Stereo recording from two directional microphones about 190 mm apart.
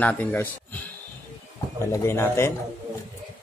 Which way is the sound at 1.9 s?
15° left (ahead or behind).